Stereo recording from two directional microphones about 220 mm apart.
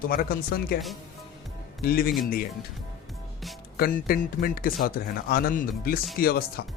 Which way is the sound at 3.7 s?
40° left (ahead or behind).